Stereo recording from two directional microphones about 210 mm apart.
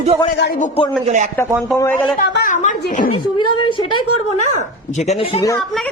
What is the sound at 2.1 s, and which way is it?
Speech, 40° left (ahead or behind).